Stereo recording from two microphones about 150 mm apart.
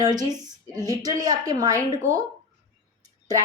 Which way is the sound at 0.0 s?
25° right (ahead or behind).